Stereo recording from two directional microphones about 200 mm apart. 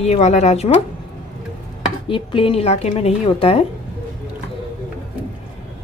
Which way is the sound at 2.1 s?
25° left (ahead or behind).